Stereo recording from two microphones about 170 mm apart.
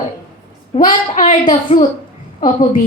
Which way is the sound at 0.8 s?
50° left (ahead or behind).